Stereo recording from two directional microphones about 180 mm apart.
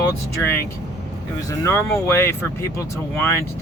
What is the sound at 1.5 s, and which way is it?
Speech, 15° left (ahead or behind).